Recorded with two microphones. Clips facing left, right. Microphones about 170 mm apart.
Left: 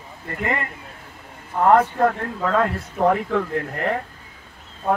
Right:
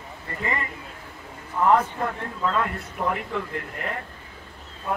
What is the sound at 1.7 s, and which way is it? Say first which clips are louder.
Speech: left 6 dB; 75° left (ahead or behind).